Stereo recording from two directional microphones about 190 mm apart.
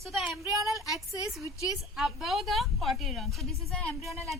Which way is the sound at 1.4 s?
15° left (ahead or behind).